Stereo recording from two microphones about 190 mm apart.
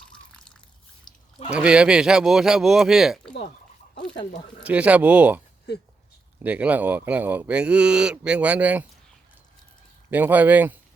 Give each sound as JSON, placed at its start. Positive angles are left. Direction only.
{"t": 1.5, "sound": "speech", "side_deg": -5}
{"t": 4.6, "sound": "speech", "side_deg": -5}
{"t": 5.7, "sound": "speech", "side_deg": 60}
{"t": 6.4, "sound": "speech", "side_deg": -10}
{"t": 10.1, "sound": "speech", "side_deg": -10}